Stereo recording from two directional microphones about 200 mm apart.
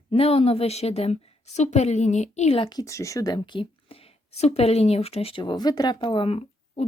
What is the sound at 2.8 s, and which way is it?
A woman's voice, 15° left (ahead or behind).